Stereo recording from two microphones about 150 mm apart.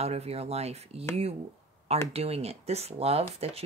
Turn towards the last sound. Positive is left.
turn(degrees=-45)  # may be behind; listen again after turning